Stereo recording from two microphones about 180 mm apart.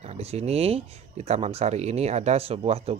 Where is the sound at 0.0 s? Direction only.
35° right (ahead or behind).